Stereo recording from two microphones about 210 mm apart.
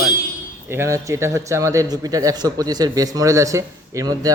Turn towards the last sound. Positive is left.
turn(degrees=-15)  # may be behind; listen again after turning